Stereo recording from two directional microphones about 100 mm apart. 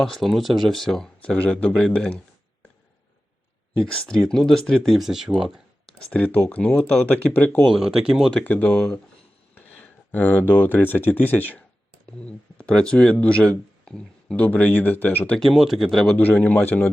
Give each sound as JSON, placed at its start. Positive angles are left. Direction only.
{"t": 0.0, "sound": "speech", "side_deg": 0}
{"t": 3.8, "sound": "speech", "side_deg": 10}
{"t": 6.1, "sound": "speech", "side_deg": 15}
{"t": 7.6, "sound": "speech", "side_deg": 0}
{"t": 8.4, "sound": "speech", "side_deg": 15}
{"t": 15.4, "sound": "speech", "side_deg": 0}
{"t": 16.1, "sound": "speech", "side_deg": 15}